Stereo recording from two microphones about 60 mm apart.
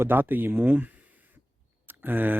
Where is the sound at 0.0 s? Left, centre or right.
Right.